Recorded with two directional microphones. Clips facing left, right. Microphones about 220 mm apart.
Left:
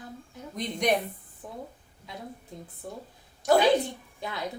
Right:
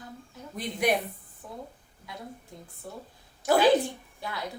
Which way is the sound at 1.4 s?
15° left (ahead or behind).